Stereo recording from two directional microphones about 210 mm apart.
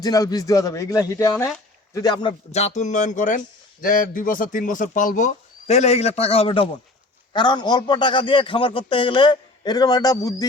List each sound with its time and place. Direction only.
0.0 s a man's voice: 15° left (ahead or behind)